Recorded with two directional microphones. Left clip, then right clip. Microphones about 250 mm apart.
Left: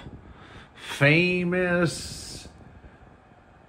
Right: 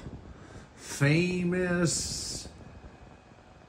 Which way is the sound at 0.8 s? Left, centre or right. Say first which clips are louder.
Left 8 dB; centre.